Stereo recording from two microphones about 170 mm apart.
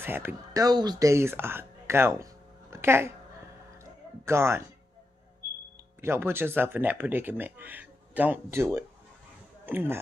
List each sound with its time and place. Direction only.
0.0 s speech: 10° right (ahead or behind)
4.3 s speech: 15° right (ahead or behind)
5.9 s speech: 15° right (ahead or behind)